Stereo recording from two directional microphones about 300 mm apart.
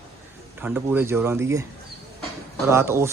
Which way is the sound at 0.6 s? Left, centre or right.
Centre.